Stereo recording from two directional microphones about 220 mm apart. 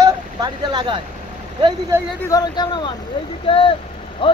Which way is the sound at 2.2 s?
15° left (ahead or behind).